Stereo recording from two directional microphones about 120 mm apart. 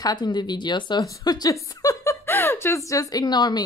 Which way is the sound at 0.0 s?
35° left (ahead or behind).